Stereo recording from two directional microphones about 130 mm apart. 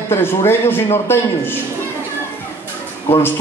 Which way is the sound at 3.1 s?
15° left (ahead or behind).